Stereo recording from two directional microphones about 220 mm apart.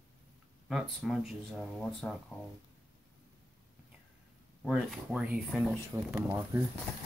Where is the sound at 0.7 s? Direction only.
Centre (ahead or behind).